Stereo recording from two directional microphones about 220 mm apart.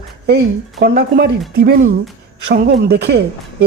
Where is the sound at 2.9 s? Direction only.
50° right (ahead or behind).